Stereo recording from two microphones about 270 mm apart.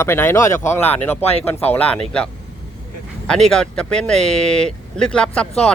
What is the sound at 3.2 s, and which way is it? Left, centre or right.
Speech, centre.